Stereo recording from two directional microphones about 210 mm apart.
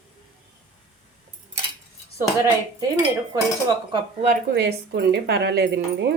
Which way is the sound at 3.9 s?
35° right (ahead or behind).